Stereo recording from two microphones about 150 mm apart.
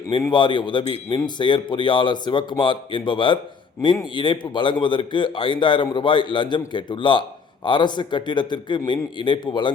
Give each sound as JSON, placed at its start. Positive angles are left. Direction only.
{"t": 0.2, "sound": "a man's voice", "side_deg": 30}